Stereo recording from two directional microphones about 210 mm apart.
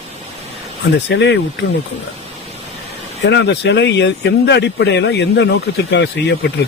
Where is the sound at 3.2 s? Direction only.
55° left (ahead or behind).